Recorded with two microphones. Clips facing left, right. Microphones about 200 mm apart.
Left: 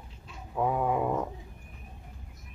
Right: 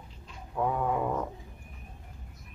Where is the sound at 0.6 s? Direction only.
5° left (ahead or behind).